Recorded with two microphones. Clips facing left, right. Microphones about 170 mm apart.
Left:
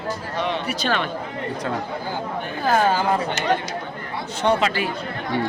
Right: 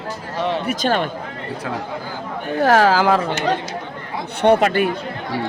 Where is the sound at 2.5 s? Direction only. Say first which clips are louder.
Right 5 dB; 75° right (ahead or behind).